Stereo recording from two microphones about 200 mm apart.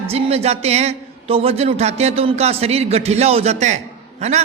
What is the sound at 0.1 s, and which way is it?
A man's voice, 30° right (ahead or behind).